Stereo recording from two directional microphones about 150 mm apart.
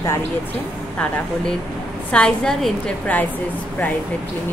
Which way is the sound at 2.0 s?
5° left (ahead or behind).